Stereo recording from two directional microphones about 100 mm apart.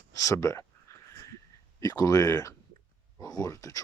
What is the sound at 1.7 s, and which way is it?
Speech, 35° left (ahead or behind).